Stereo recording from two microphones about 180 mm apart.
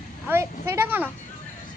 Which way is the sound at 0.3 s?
10° right (ahead or behind).